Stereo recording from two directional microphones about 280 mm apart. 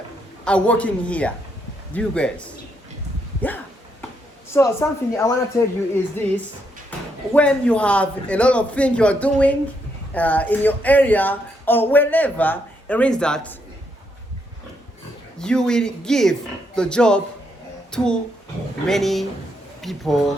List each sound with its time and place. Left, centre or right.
0.4 s speech: centre
4.5 s speech: centre
7.3 s speech: centre
15.4 s speech: centre